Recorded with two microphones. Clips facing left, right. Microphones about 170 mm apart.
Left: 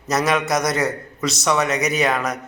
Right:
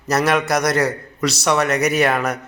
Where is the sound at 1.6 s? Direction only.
60° right (ahead or behind).